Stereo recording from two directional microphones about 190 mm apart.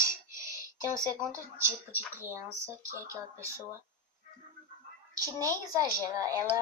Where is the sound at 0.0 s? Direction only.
15° right (ahead or behind).